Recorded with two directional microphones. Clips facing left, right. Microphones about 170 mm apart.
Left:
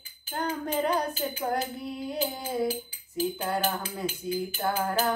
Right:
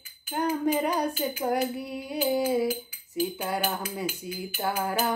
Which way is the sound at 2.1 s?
10° right (ahead or behind).